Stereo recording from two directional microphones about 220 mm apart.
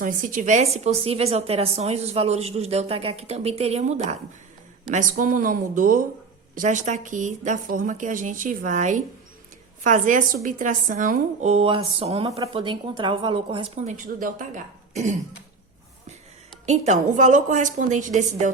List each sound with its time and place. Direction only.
0.0 s a woman's voice: 40° right (ahead or behind)
16.6 s a woman's voice: 30° right (ahead or behind)